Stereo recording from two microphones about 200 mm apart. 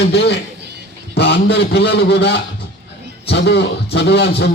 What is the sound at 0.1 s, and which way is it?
A man's voice, 55° left (ahead or behind).